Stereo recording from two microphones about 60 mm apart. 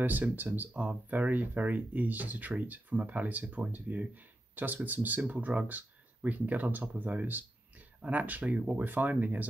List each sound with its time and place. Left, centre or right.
0.0 s speech: right